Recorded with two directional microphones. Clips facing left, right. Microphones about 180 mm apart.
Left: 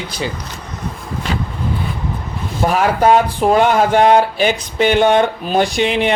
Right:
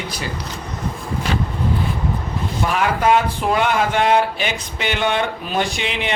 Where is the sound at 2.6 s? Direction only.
40° left (ahead or behind).